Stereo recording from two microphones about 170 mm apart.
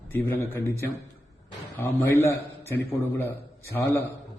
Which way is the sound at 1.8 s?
15° left (ahead or behind).